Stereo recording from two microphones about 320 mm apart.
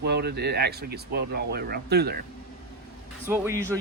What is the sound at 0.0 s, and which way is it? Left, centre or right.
Speech, right.